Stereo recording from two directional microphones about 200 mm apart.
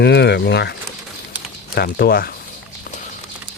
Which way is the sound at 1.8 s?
50° left (ahead or behind).